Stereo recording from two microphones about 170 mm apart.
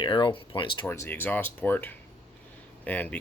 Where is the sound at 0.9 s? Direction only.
10° left (ahead or behind).